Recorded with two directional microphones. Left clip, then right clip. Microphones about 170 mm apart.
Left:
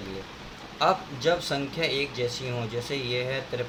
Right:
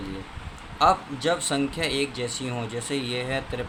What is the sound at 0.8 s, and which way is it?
Speech, 25° right (ahead or behind).